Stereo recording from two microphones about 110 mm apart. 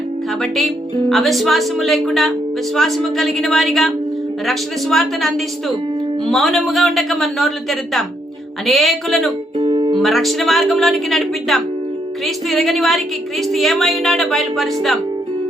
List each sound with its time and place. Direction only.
0.4 s speech: centre (ahead or behind)
9.6 s music: 45° right (ahead or behind)
10.0 s speech: centre (ahead or behind)